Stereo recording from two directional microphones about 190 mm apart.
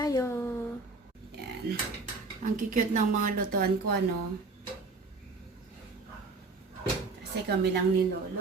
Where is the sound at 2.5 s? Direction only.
40° right (ahead or behind).